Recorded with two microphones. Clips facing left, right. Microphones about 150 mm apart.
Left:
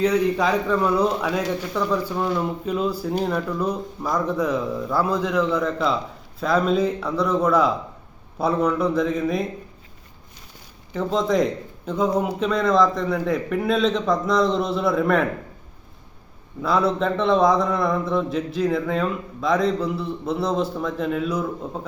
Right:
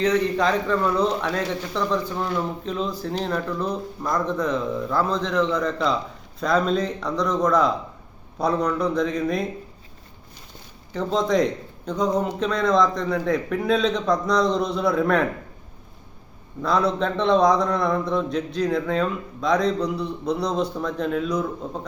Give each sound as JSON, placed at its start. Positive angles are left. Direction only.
{"t": 0.0, "sound": "a man's voice", "side_deg": 10}
{"t": 10.9, "sound": "a man's voice", "side_deg": 0}
{"t": 16.6, "sound": "a man's voice", "side_deg": 5}